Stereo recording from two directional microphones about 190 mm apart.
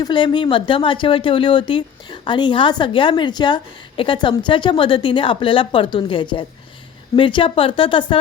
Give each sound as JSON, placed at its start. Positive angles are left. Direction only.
{"t": 0.0, "sound": "speech", "side_deg": 25}